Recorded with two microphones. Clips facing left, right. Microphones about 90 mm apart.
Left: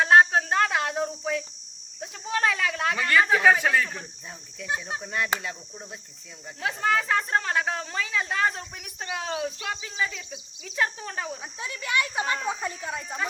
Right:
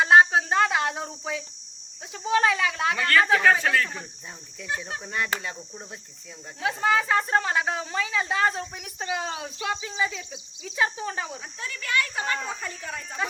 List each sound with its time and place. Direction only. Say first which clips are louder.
0.0 s a sound: right 1 dB; 5° right (ahead or behind)
2.0 s speech: right 4 dB; 5° right (ahead or behind)
5.0 s speech: even; centre (ahead or behind)
11.6 s speech: even; 20° left (ahead or behind)